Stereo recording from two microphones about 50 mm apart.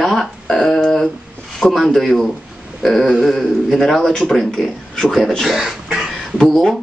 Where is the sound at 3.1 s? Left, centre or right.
Centre.